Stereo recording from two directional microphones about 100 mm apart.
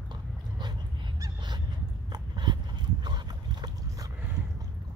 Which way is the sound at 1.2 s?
45° right (ahead or behind).